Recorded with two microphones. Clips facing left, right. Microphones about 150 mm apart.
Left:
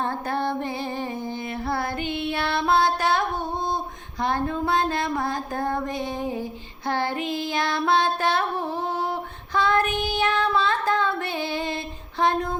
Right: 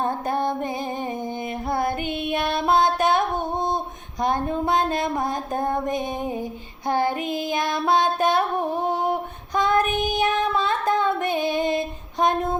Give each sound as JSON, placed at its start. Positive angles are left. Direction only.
{"t": 0.0, "sound": "music", "side_deg": -20}
{"t": 4.2, "sound": "a sound", "side_deg": -20}
{"t": 6.8, "sound": "child singing", "side_deg": -20}